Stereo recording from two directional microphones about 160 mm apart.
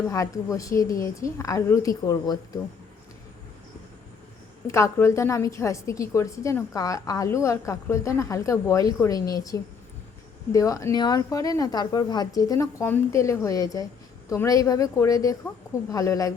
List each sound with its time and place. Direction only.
0.1 s a woman's voice: 20° left (ahead or behind)
4.6 s a woman's voice: 20° left (ahead or behind)